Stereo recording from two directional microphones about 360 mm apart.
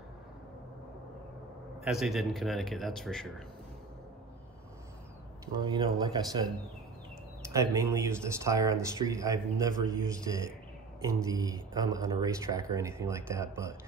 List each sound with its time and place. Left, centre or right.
1.9 s a man's voice: centre
5.5 s speech: centre
7.4 s speech: centre